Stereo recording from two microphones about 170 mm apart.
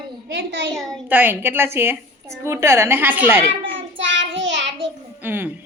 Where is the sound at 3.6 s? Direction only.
90° right.